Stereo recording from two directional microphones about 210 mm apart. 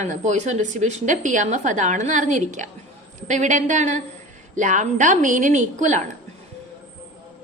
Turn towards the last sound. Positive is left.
turn(degrees=-35)  # may be behind; listen again after turning